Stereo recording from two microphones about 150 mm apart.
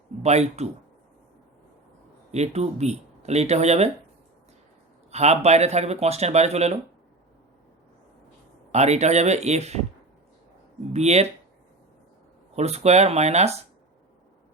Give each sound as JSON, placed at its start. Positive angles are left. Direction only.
{"t": 0.2, "sound": "speech", "side_deg": -45}
{"t": 2.3, "sound": "speech", "side_deg": -45}
{"t": 5.1, "sound": "speech", "side_deg": -45}
{"t": 8.7, "sound": "speech", "side_deg": -50}
{"t": 10.9, "sound": "speech", "side_deg": -45}
{"t": 12.5, "sound": "speech", "side_deg": -45}